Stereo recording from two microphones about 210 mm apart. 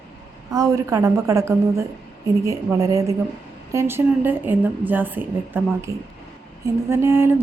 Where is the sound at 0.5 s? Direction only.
15° right (ahead or behind).